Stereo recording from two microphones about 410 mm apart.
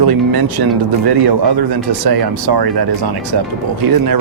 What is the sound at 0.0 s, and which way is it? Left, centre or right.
Speech, right.